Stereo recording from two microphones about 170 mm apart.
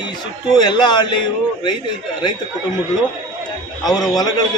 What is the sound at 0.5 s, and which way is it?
Speech, 25° left (ahead or behind).